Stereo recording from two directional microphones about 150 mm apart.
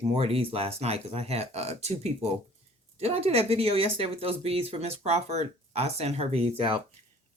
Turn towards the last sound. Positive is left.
turn(degrees=-35)  # may be behind; listen again after turning